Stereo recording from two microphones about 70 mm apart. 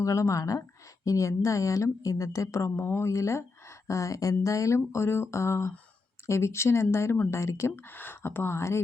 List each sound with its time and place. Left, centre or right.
0.0 s a woman's voice: left
3.1 s a woman's voice: left
7.9 s speech: left